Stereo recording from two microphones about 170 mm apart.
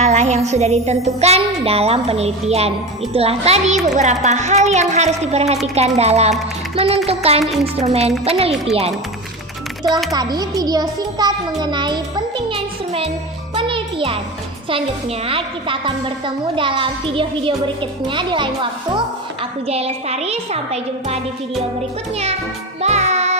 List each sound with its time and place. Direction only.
0.0 s a woman's voice: 45° right (ahead or behind)
10.1 s a child's voice: 25° right (ahead or behind)
12.5 s music: 35° right (ahead or behind)
14.7 s a woman's voice: 30° right (ahead or behind)
22.8 s music: 40° right (ahead or behind)